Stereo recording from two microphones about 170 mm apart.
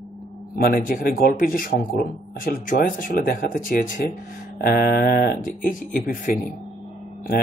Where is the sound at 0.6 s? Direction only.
60° left (ahead or behind).